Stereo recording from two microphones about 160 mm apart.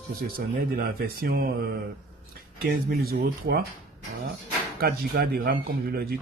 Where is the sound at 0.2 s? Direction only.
70° right (ahead or behind).